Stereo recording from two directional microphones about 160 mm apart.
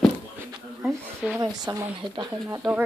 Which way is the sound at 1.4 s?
25° right (ahead or behind).